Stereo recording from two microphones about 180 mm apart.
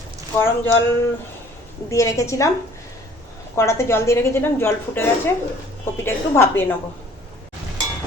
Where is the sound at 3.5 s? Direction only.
15° left (ahead or behind).